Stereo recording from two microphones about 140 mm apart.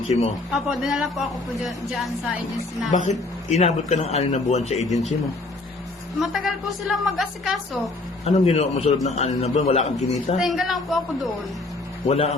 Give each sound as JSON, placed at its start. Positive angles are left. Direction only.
{"t": 0.1, "sound": "a man's voice", "side_deg": 45}
{"t": 0.5, "sound": "a man's voice", "side_deg": 0}
{"t": 2.9, "sound": "a man's voice", "side_deg": 55}
{"t": 6.1, "sound": "a man's voice", "side_deg": 0}
{"t": 8.2, "sound": "a man's voice", "side_deg": 50}
{"t": 10.3, "sound": "a man's voice", "side_deg": 0}
{"t": 12.0, "sound": "a man's voice", "side_deg": 45}